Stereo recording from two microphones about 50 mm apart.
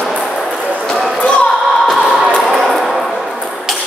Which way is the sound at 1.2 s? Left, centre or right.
Left.